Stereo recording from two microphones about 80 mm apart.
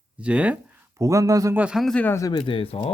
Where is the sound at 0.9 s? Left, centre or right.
Right.